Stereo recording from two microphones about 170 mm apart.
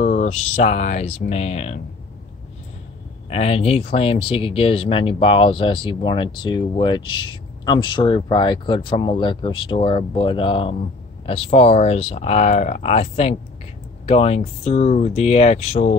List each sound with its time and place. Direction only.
0.0 s a sound: 50° left (ahead or behind)
0.3 s speech: 40° left (ahead or behind)
3.3 s speech: 40° left (ahead or behind)